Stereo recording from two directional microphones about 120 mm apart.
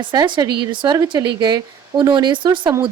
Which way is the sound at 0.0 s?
40° right (ahead or behind).